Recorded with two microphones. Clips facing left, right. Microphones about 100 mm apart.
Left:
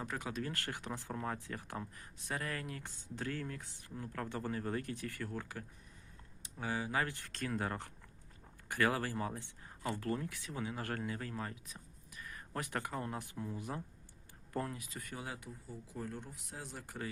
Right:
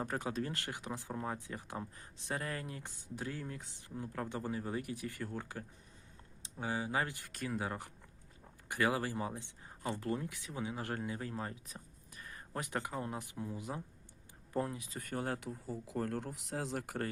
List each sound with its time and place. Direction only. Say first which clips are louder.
0.0 s speech: right 3 dB; 35° right (ahead or behind); by 14.8 s 20° right (ahead or behind)
15.0 s speech: right 8 dB; 50° right (ahead or behind)
15.4 s speech: right 6 dB; 80° right